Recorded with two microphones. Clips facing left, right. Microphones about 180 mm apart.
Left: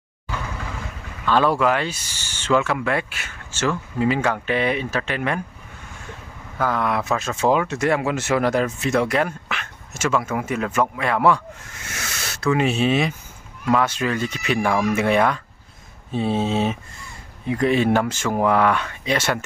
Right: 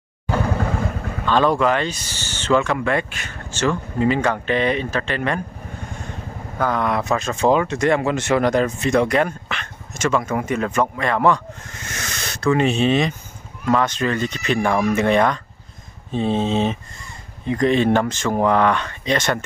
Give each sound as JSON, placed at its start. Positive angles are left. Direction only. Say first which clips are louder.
{"t": 0.3, "sound": "vehicle", "louder": "right 9 dB", "side_deg": -50}
{"t": 1.2, "sound": "speech", "louder": "right 1 dB", "side_deg": 10}
{"t": 6.6, "sound": "speech", "louder": "right 1 dB", "side_deg": 5}